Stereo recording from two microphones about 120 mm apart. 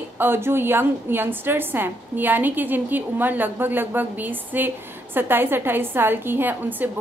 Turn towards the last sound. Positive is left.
turn(degrees=-15)  # may be behind; listen again after turning